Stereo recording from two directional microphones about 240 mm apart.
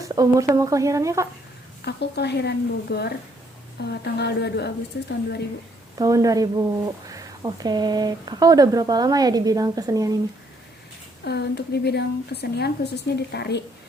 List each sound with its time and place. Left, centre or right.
0.0 s speech: centre
1.8 s a woman's voice: left
6.0 s speech: centre
11.2 s a woman's voice: left